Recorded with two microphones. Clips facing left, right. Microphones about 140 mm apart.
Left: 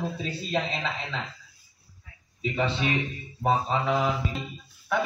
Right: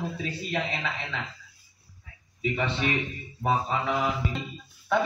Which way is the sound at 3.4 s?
25° left (ahead or behind).